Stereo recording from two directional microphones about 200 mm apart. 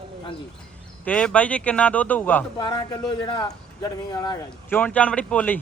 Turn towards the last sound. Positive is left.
turn(degrees=10)  # may be behind; listen again after turning